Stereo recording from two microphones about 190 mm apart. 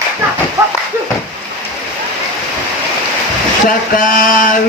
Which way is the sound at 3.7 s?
45° left (ahead or behind).